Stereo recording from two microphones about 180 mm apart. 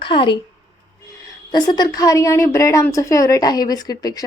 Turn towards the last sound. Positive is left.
turn(degrees=20)  # may be behind; listen again after turning